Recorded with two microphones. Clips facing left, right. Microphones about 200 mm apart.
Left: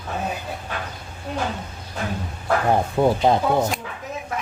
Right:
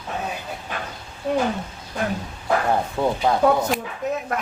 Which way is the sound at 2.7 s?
20° left (ahead or behind).